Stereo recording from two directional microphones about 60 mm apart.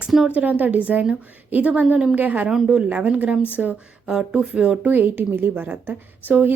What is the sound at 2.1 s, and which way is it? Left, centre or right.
Speech, right.